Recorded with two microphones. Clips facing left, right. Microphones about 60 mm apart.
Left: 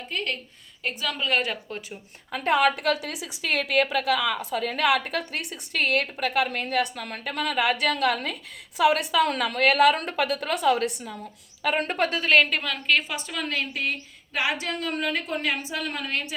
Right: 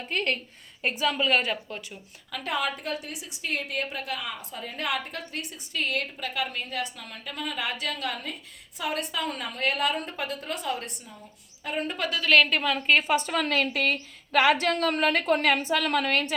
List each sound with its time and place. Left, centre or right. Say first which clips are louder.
0.1 s a woman's voice: right 2 dB; right
0.8 s a woman's voice: right 3 dB; right
1.3 s a woman's voice: left 3 dB; centre
2.3 s a woman's voice: left 8 dB; left
11.6 s a woman's voice: left 5 dB; left
12.9 s a woman's voice: right 2 dB; right